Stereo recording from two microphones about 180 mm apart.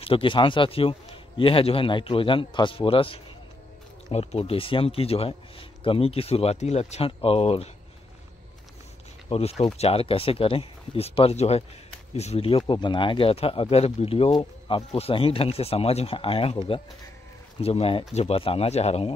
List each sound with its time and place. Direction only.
0.0 s a man's voice: 30° left (ahead or behind)
9.3 s speech: 35° left (ahead or behind)